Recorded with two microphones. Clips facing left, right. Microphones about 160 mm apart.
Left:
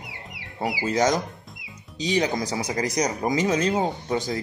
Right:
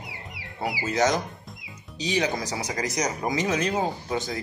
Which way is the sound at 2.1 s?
35° left (ahead or behind).